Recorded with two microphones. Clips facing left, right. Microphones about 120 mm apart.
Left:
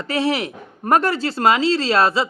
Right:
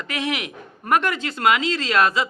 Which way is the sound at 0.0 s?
35° left (ahead or behind).